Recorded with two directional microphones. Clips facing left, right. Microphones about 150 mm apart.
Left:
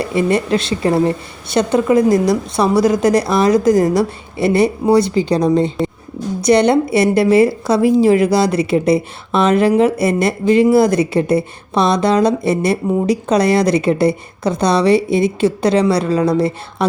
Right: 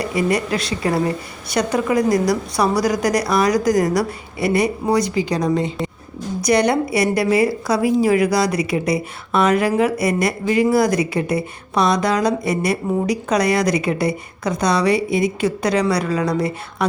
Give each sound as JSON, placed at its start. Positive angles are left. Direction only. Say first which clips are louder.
{"t": 0.0, "sound": "a woman's voice", "louder": "left 4 dB", "side_deg": 25}